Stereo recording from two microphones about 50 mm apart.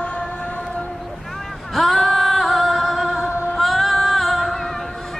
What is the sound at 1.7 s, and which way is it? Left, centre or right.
Female singing, centre.